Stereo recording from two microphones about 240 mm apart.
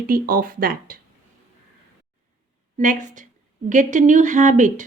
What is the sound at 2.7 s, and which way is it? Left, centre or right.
Speech, right.